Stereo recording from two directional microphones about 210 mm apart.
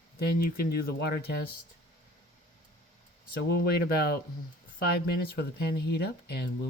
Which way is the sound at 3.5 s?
50° left (ahead or behind).